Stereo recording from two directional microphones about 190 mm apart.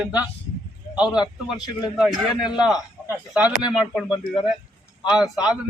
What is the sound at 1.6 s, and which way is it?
Speech, centre (ahead or behind).